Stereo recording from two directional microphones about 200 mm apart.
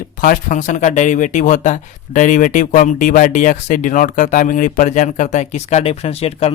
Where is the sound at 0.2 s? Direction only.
40° left (ahead or behind).